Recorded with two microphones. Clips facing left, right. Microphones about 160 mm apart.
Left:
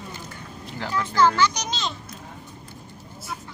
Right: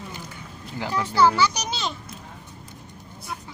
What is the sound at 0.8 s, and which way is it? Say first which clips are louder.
A child's voice: right 1 dB; 15° right (ahead or behind).